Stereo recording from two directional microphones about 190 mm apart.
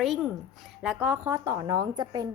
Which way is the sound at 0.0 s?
Centre (ahead or behind).